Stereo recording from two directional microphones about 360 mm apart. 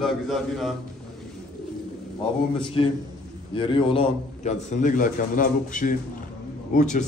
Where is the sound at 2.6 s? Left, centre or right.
Centre.